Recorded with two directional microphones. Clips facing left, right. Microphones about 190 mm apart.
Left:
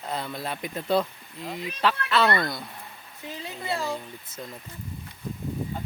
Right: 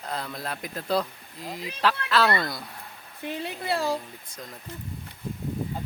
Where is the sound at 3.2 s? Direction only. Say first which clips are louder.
Right 3 dB; 65° right (ahead or behind).